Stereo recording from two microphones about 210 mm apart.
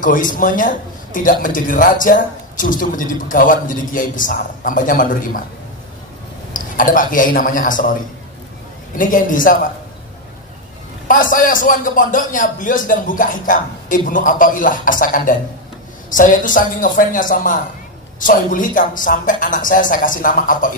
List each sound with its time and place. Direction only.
0.0 s a man's voice: 40° left (ahead or behind)
6.5 s a man's voice: 40° left (ahead or behind)
11.1 s a man's voice: 40° left (ahead or behind)